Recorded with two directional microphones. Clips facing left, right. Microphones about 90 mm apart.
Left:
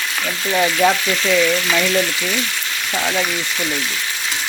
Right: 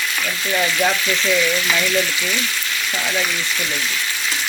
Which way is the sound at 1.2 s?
15° left (ahead or behind).